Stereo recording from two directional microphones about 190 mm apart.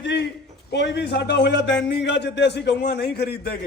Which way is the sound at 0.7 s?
65° left (ahead or behind).